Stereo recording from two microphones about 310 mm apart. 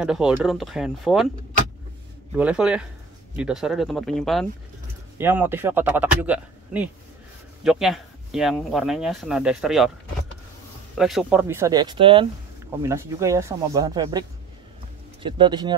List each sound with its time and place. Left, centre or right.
0.0 s speech: centre
2.3 s speech: centre
11.0 s speech: centre
15.2 s speech: centre